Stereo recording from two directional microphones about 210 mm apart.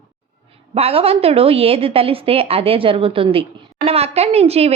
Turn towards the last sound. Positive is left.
turn(degrees=-30)  # may be behind; listen again after turning